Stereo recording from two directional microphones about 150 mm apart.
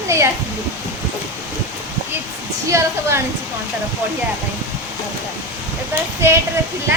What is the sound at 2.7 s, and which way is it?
Speech, 20° right (ahead or behind).